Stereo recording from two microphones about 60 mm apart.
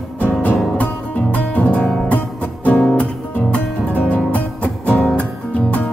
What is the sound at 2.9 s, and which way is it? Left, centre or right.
Music, left.